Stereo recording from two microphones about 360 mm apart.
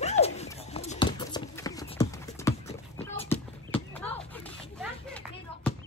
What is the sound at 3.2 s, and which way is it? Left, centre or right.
Horse, centre.